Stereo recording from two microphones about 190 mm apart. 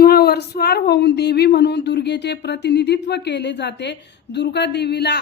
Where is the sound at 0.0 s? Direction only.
55° left (ahead or behind).